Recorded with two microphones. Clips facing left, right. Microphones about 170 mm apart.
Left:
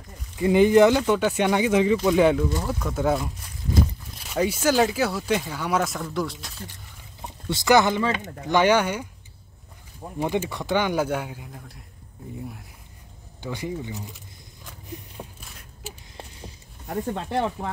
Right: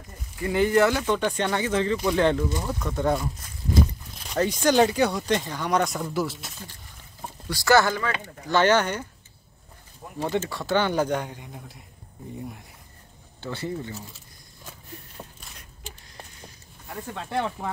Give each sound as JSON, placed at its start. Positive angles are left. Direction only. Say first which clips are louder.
{"t": 0.4, "sound": "speech", "louder": "left 5 dB", "side_deg": 20}
{"t": 4.3, "sound": "speech", "louder": "even", "side_deg": 5}
{"t": 7.4, "sound": "speech", "louder": "left 1 dB", "side_deg": 20}
{"t": 10.1, "sound": "speech", "louder": "left 1 dB", "side_deg": 15}
{"t": 13.4, "sound": "speech", "louder": "left 1 dB", "side_deg": 15}
{"t": 15.2, "sound": "a sound", "louder": "left 3 dB", "side_deg": 10}